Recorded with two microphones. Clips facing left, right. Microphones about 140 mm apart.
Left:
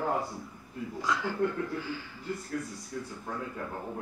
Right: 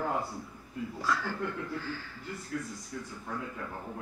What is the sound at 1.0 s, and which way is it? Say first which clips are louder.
A woman's voice: left 4 dB; 20° left (ahead or behind).